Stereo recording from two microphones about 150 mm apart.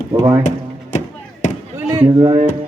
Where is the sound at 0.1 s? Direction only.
20° right (ahead or behind).